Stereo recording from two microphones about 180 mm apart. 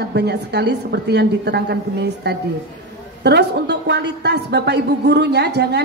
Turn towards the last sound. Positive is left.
turn(degrees=-70)  # may be behind; listen again after turning